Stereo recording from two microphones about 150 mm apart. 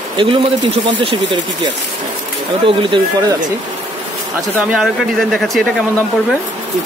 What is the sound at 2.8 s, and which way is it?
Speech, 35° right (ahead or behind).